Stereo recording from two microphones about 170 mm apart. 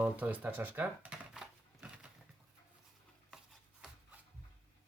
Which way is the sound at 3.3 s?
5° right (ahead or behind).